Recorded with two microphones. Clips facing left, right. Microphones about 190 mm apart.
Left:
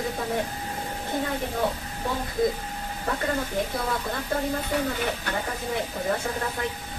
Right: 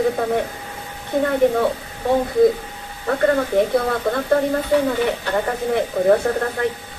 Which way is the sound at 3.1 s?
65° right (ahead or behind).